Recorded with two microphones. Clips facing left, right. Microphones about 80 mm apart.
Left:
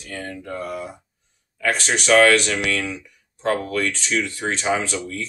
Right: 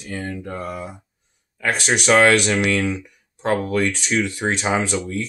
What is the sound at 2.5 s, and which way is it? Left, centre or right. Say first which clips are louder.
Speech: right 4 dB; right.